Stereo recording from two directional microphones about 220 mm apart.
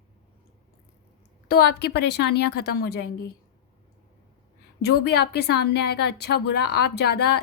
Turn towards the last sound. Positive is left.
turn(degrees=50)  # may be behind; listen again after turning